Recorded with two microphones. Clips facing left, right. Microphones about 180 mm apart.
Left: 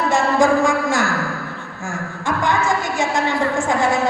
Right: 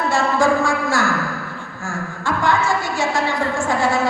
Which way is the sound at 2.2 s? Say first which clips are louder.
Even; 20° left (ahead or behind).